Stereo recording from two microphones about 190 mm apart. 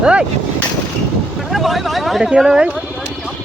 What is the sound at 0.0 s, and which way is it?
Speech, 5° right (ahead or behind).